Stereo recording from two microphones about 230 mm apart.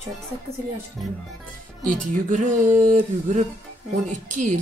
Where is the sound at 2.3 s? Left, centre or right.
Right.